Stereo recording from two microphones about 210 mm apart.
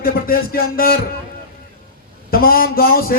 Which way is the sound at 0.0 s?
45° left (ahead or behind).